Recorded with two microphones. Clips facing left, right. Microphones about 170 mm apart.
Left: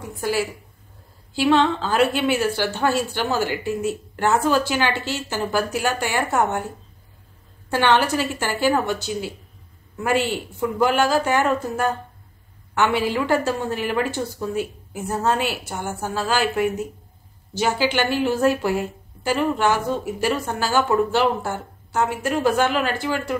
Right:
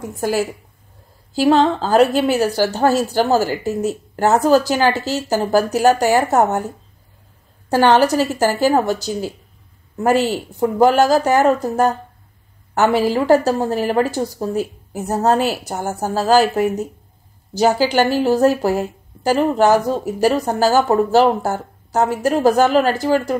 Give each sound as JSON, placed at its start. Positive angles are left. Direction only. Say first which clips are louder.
{"t": 0.1, "sound": "a woman's voice", "louder": "right 4 dB", "side_deg": -45}
{"t": 7.7, "sound": "a woman's voice", "louder": "right 6 dB", "side_deg": -40}